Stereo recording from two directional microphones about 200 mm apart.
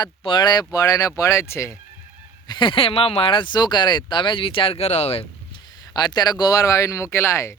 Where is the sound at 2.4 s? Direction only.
25° left (ahead or behind).